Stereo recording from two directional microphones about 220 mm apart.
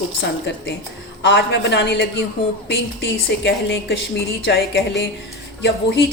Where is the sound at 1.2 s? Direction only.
50° left (ahead or behind).